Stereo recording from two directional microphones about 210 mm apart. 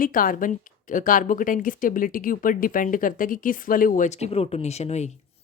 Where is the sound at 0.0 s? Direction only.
40° left (ahead or behind).